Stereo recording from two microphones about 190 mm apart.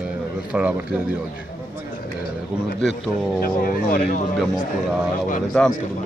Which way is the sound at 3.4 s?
50° left (ahead or behind).